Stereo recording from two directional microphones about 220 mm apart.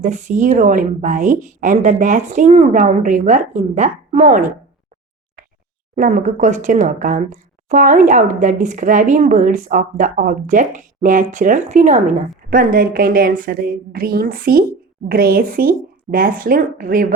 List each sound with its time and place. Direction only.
0.0 s speech: 35° right (ahead or behind)
6.0 s speech: 35° right (ahead or behind)